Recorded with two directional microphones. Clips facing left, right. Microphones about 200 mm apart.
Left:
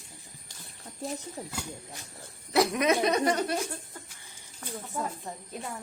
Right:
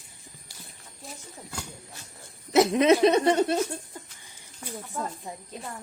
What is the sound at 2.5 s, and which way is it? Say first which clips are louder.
Speech: right 5 dB; 25° right (ahead or behind).